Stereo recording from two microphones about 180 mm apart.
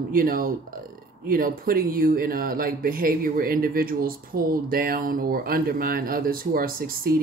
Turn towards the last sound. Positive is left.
turn(degrees=-55)  # may be behind; listen again after turning